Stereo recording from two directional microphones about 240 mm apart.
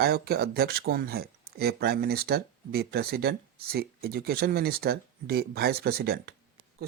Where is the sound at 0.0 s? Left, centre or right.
Right.